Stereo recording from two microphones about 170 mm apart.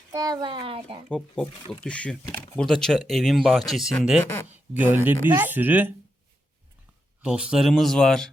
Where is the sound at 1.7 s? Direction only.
5° left (ahead or behind).